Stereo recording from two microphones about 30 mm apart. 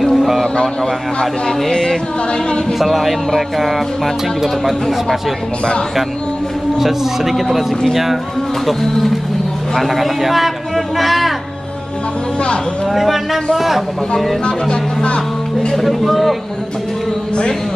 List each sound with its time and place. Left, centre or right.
0.0 s a sound: centre
1.7 s speech: centre
2.8 s music: centre
6.8 s speech: centre
7.5 s music: centre
9.8 s music: centre
11.0 s speech: centre
12.9 s music: centre
13.6 s speech: centre
14.4 s speech: left
15.7 s music: centre